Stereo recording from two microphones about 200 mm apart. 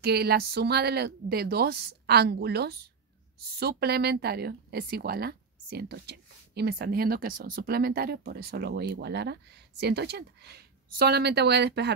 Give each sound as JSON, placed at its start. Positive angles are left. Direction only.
{"t": 0.0, "sound": "speech", "side_deg": -55}